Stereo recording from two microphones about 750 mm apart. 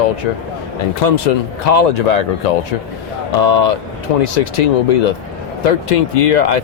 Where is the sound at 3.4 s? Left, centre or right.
Left.